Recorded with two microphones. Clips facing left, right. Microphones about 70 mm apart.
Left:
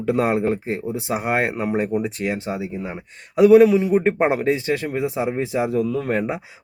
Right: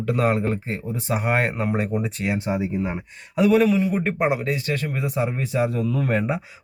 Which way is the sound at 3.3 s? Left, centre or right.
Centre.